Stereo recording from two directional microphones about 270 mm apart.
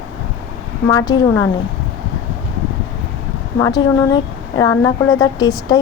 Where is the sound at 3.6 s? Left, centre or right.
Centre.